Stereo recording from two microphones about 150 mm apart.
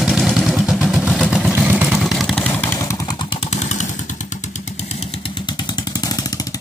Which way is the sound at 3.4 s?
50° left (ahead or behind).